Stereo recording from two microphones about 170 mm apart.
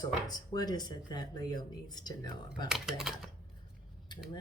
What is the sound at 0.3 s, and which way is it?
Speech, 25° left (ahead or behind).